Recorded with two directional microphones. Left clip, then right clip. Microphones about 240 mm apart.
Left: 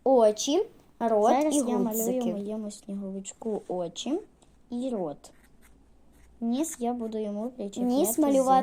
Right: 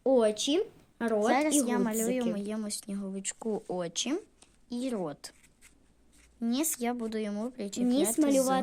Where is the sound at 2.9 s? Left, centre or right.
Right.